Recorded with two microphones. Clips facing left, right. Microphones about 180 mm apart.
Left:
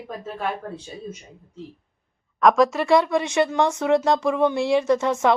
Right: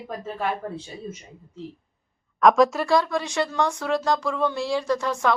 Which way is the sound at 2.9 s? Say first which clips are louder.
Left 4 dB; 20° left (ahead or behind).